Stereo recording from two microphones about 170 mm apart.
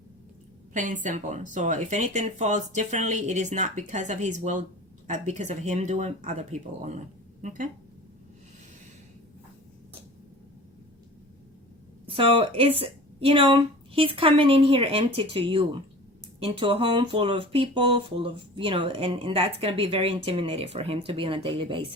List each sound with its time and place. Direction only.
0.7 s speech: 50° right (ahead or behind)
7.4 s speech: 50° right (ahead or behind)
12.0 s speech: 30° right (ahead or behind)